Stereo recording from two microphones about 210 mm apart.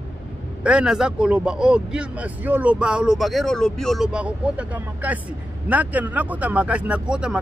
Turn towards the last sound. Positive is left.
turn(degrees=-5)  # may be behind; listen again after turning